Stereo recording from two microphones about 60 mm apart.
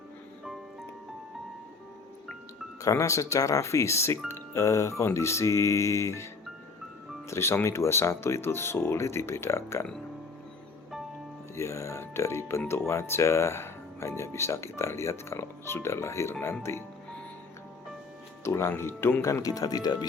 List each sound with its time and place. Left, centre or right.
2.8 s music: left
7.3 s speech: left
11.5 s speech: left
18.4 s speech: left
19.5 s speech: left